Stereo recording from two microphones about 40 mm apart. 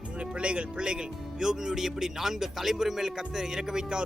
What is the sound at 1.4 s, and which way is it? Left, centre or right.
Speech, centre.